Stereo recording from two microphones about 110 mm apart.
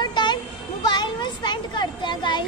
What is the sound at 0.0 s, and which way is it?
Children playing, 45° left (ahead or behind).